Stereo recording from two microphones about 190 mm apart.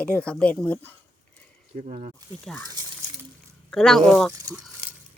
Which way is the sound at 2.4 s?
Centre (ahead or behind).